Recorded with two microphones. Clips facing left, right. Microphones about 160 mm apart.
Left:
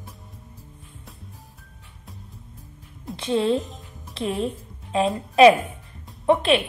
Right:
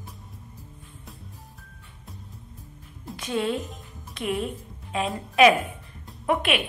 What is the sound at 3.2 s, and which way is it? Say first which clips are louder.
A woman's voice: left 5 dB; 30° left (ahead or behind).